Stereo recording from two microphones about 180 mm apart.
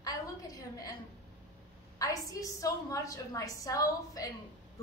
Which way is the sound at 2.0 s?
20° left (ahead or behind).